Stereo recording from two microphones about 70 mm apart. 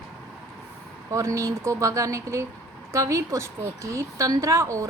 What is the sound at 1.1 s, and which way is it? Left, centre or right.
A woman's voice, right.